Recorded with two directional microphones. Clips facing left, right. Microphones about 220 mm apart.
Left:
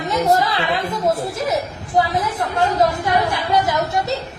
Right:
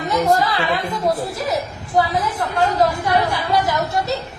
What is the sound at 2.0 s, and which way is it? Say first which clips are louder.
Speech: even; 20° left (ahead or behind).